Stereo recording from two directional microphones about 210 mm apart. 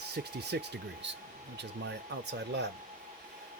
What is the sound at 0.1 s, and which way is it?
Speech, 50° right (ahead or behind).